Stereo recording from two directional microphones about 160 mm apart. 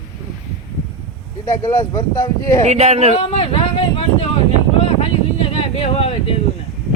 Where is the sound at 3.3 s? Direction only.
35° left (ahead or behind).